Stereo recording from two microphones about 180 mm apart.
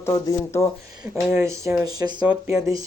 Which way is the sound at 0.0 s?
15° left (ahead or behind).